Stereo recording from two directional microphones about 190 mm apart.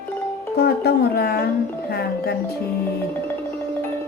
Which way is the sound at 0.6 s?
55° left (ahead or behind).